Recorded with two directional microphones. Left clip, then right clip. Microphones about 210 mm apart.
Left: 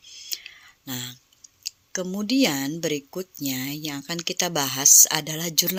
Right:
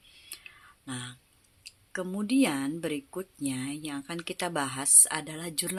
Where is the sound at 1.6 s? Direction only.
20° left (ahead or behind).